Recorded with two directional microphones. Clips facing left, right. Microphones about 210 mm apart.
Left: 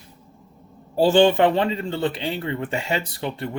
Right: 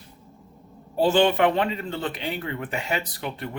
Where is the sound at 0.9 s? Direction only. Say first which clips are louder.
Left 4 dB; 30° left (ahead or behind).